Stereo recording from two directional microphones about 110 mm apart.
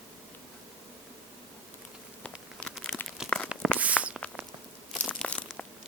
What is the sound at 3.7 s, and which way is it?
Walk, 10° right (ahead or behind).